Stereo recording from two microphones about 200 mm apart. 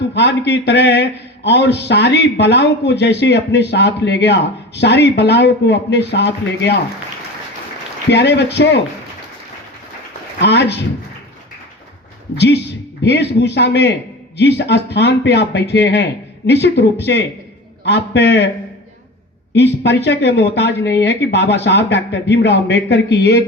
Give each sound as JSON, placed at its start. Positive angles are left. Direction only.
{"t": 0.1, "sound": "a man's voice", "side_deg": 60}
{"t": 8.1, "sound": "a man's voice", "side_deg": 60}
{"t": 10.4, "sound": "a man's voice", "side_deg": 60}
{"t": 13.0, "sound": "a man's voice", "side_deg": 60}
{"t": 19.5, "sound": "a man's voice", "side_deg": 55}